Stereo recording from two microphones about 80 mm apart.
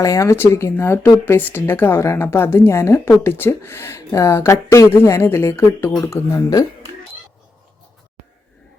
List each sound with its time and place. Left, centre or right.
0.0 s a woman's voice: left